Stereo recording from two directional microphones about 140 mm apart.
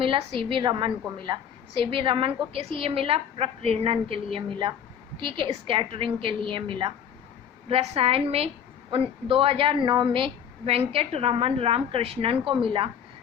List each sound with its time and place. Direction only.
0.0 s a woman's voice: 40° right (ahead or behind)